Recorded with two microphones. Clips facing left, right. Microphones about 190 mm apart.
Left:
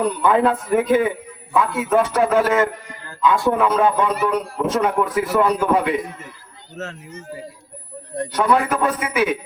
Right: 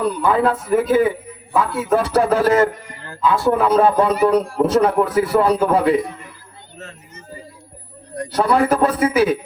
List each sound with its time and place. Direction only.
0.3 s a man's voice: 35° right (ahead or behind)
6.8 s speech: 80° left
8.3 s a man's voice: 35° right (ahead or behind)